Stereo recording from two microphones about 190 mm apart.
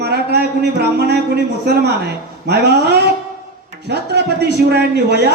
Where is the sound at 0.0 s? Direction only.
60° right (ahead or behind).